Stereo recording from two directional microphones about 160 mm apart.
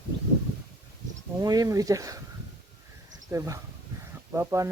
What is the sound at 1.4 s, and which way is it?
Speech, 25° right (ahead or behind).